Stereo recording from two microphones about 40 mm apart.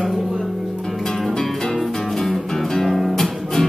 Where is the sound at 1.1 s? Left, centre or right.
Centre.